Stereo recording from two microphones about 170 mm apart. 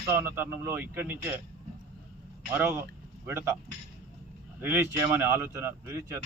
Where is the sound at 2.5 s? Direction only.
15° right (ahead or behind).